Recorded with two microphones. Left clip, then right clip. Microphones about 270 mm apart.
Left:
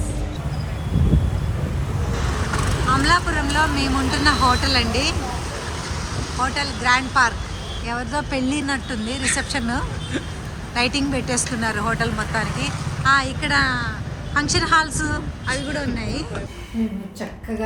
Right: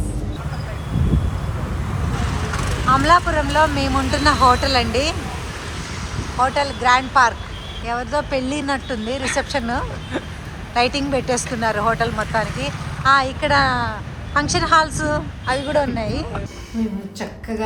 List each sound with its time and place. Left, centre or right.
2.5 s vehicle: left
2.9 s speech: centre
6.4 s speech: centre